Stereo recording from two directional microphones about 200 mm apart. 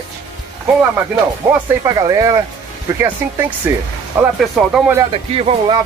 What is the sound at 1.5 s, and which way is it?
Speech, 10° right (ahead or behind).